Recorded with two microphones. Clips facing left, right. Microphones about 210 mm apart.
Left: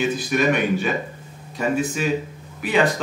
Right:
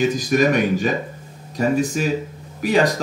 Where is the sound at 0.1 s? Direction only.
40° right (ahead or behind).